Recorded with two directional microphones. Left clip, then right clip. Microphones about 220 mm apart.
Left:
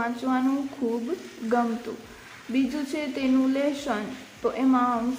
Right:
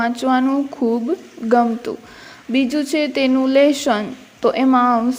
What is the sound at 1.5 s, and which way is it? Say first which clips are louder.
A woman's voice: right 10 dB; 30° right (ahead or behind).